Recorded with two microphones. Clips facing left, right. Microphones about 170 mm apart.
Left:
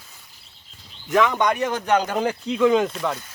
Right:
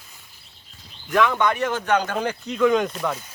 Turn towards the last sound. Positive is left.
turn(degrees=0)  # may be behind; listen again after turning